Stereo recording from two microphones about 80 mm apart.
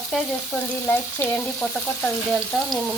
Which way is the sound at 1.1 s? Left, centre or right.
Left.